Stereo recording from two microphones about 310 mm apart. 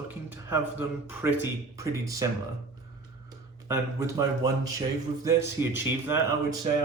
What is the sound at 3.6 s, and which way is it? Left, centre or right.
A man's voice, centre.